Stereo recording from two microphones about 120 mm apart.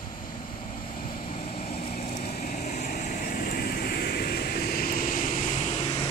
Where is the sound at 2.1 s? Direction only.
90° left.